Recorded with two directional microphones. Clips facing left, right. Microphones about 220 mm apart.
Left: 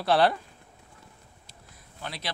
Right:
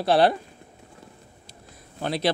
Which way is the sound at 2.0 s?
30° right (ahead or behind).